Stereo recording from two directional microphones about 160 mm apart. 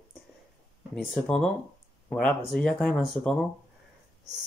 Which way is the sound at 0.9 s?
Centre (ahead or behind).